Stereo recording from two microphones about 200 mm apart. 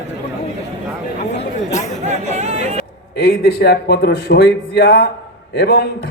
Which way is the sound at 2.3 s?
35° right (ahead or behind).